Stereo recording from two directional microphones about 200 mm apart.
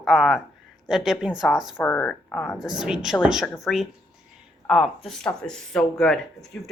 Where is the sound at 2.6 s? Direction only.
5° right (ahead or behind).